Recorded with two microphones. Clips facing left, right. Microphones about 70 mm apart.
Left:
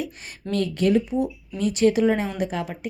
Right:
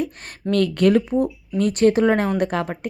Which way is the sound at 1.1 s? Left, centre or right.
Right.